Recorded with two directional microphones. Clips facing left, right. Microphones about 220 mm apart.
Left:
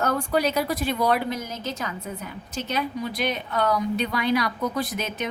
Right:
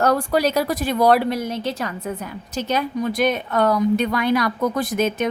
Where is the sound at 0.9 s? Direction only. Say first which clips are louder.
Right 10 dB; 80° right.